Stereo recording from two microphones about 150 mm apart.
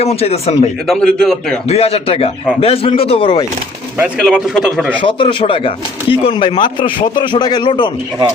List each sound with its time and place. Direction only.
0.0 s speech: 45° left (ahead or behind)
0.9 s a man's voice: 5° left (ahead or behind)
1.6 s speech: 40° left (ahead or behind)
4.2 s a man's voice: 5° right (ahead or behind)
4.9 s speech: 35° left (ahead or behind)